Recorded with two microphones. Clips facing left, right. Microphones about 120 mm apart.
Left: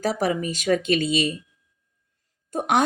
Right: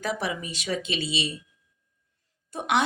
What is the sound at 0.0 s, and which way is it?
Speech, 40° left (ahead or behind).